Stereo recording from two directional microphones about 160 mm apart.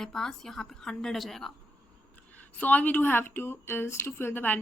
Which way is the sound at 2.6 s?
10° left (ahead or behind).